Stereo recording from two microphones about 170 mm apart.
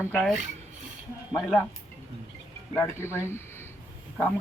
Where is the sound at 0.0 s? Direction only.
10° left (ahead or behind).